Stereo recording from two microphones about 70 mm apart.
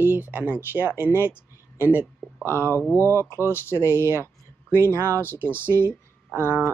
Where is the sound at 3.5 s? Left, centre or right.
Left.